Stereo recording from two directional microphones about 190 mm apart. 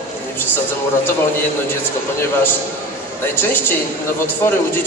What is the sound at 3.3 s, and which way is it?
Speech, 10° left (ahead or behind).